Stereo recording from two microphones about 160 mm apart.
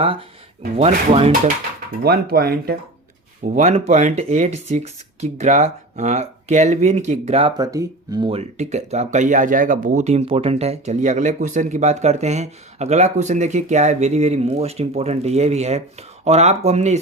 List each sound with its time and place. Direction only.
0.0 s speech: 35° right (ahead or behind)
2.0 s speech: 75° right (ahead or behind)
3.4 s speech: 50° right (ahead or behind)
7.5 s speech: 20° right (ahead or behind); by 17.0 s 45° right (ahead or behind)